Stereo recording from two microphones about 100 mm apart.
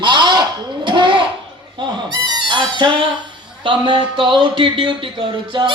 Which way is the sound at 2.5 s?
50° right (ahead or behind).